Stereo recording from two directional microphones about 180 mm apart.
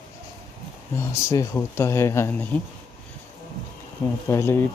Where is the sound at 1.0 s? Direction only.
15° left (ahead or behind).